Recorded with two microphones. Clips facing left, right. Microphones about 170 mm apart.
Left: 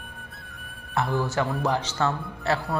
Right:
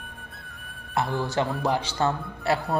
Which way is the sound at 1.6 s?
10° right (ahead or behind).